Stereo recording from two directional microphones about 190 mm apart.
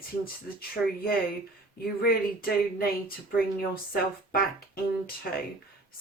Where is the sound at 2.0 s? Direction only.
50° left (ahead or behind).